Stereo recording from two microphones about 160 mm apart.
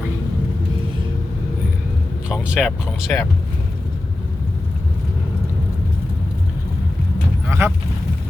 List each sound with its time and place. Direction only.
2.3 s speech: 5° right (ahead or behind)
7.4 s speech: 15° right (ahead or behind)